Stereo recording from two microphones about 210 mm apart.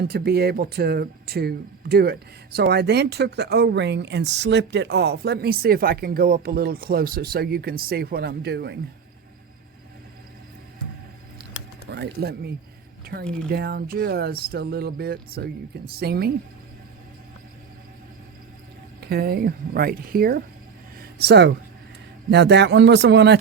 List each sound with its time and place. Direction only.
0.0 s speech: 50° right (ahead or behind)
11.9 s speech: 55° right (ahead or behind)
18.9 s speech: 50° right (ahead or behind)
21.0 s a sound: 50° right (ahead or behind)
22.3 s speech: 55° right (ahead or behind)